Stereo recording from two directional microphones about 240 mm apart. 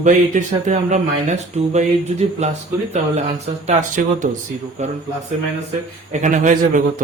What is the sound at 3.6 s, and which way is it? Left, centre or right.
Speech, right.